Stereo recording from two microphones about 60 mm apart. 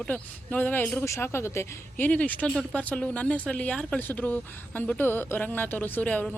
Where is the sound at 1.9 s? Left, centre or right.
Left.